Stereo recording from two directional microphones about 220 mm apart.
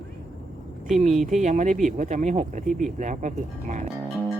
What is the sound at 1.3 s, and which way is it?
Speech, 35° right (ahead or behind).